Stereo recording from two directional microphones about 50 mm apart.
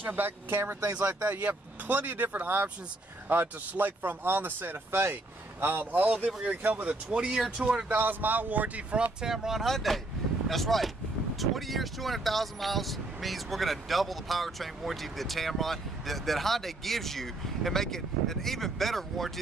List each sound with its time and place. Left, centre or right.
0.0 s speech: right
0.8 s speech: right
7.1 s speech: centre
7.9 s speech: right
9.2 s speech: centre
9.7 s speech: centre